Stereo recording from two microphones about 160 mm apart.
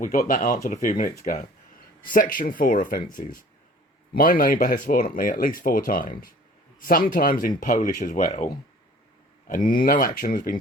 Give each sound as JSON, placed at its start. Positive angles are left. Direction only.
{"t": 0.3, "sound": "speech", "side_deg": 55}
{"t": 9.5, "sound": "speech", "side_deg": 55}